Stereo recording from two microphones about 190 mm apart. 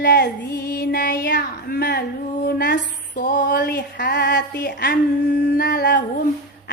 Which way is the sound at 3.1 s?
40° left (ahead or behind).